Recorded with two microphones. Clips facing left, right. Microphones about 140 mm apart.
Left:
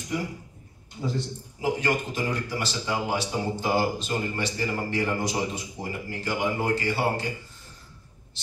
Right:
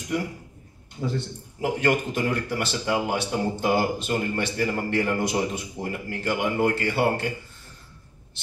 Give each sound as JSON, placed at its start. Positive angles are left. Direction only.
{"t": 1.0, "sound": "a man's voice", "side_deg": -55}